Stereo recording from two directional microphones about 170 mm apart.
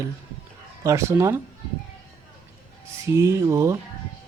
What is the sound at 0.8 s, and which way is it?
Music, 15° right (ahead or behind).